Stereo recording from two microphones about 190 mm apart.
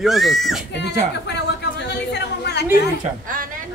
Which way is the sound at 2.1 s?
60° left (ahead or behind).